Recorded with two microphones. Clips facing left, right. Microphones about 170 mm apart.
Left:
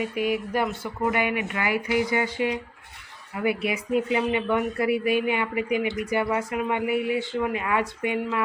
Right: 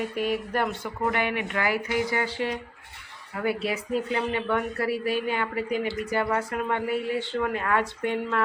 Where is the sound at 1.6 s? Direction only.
40° right (ahead or behind).